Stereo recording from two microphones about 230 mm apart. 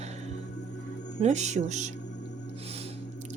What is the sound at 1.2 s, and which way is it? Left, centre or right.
Speech, right.